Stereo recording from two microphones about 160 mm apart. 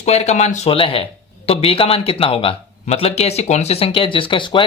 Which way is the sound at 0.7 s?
35° left (ahead or behind).